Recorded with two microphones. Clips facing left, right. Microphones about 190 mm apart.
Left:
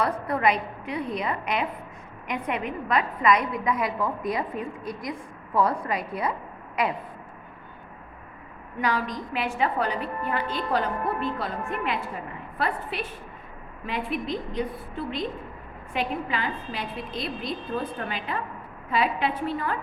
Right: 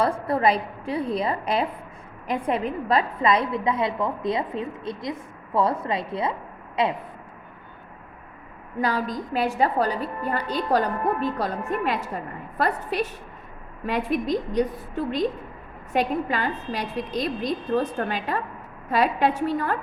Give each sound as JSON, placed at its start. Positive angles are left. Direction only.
{"t": 0.0, "sound": "a woman's voice", "side_deg": -30}
{"t": 8.8, "sound": "a woman's voice", "side_deg": -35}